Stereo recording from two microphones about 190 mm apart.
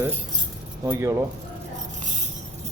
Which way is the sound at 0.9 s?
15° right (ahead or behind).